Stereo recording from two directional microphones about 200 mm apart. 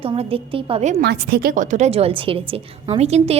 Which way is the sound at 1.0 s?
50° right (ahead or behind).